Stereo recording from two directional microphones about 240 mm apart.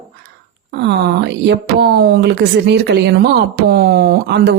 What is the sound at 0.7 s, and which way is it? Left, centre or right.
Speech, right.